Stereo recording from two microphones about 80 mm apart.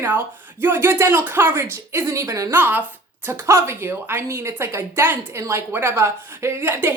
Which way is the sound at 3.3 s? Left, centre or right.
Right.